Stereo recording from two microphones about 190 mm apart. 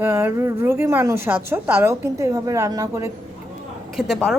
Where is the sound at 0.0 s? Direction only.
10° right (ahead or behind).